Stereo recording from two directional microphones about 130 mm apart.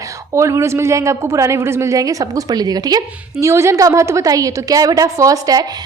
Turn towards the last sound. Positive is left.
turn(degrees=-30)  # may be behind; listen again after turning